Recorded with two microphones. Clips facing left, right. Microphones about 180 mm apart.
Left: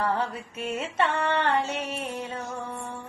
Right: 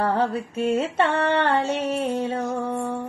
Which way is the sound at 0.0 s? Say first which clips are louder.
Right 5 dB; 30° right (ahead or behind).